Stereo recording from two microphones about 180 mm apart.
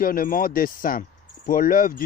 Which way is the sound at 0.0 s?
50° left (ahead or behind).